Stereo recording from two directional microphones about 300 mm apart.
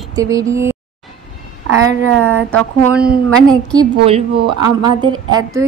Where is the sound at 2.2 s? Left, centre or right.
Right.